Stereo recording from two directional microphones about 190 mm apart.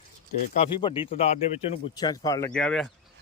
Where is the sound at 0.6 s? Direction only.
25° left (ahead or behind).